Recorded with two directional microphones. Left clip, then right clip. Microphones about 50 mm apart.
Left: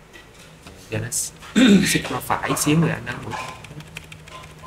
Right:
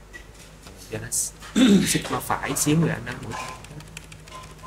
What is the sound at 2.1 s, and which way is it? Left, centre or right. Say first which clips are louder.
Speech: left 3 dB; centre.